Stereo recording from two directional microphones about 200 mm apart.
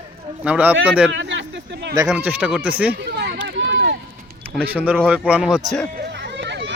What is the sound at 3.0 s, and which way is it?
Run, 55° right (ahead or behind).